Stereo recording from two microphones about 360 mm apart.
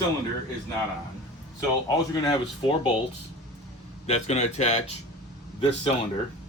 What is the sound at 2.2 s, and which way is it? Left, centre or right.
Speech, centre.